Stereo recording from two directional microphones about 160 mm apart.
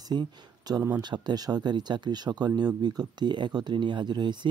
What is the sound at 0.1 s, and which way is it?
Speech, 25° right (ahead or behind).